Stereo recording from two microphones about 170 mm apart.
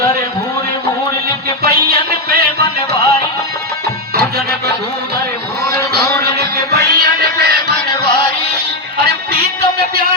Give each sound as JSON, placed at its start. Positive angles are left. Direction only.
{"t": 1.6, "sound": "music", "side_deg": -65}
{"t": 4.1, "sound": "music", "side_deg": -65}
{"t": 5.9, "sound": "music", "side_deg": -70}
{"t": 9.0, "sound": "music", "side_deg": -70}